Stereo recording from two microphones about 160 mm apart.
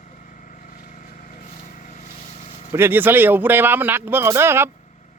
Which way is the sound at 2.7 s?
15° right (ahead or behind).